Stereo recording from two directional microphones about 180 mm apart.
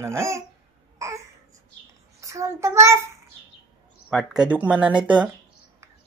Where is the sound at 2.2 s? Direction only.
15° right (ahead or behind).